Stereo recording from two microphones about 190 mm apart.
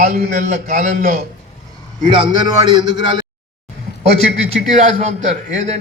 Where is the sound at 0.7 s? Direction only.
40° right (ahead or behind).